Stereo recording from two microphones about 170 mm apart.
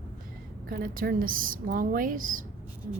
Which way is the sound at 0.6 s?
55° right (ahead or behind).